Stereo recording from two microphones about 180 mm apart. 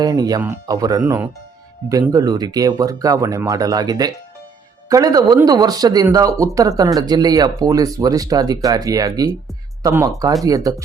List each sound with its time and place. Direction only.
0.0 s speech: 20° right (ahead or behind)